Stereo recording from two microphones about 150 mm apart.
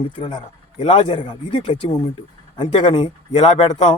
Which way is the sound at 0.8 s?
35° left (ahead or behind).